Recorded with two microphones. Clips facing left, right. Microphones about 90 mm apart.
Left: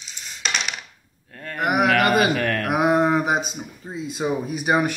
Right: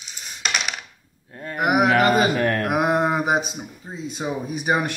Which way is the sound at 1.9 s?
30° right (ahead or behind).